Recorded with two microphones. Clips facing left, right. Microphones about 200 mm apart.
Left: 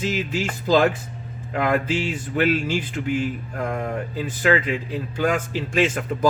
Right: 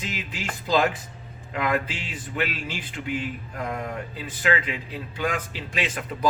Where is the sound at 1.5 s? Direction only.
45° left (ahead or behind).